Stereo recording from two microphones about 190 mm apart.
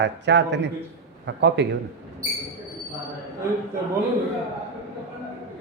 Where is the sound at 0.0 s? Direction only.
65° right (ahead or behind).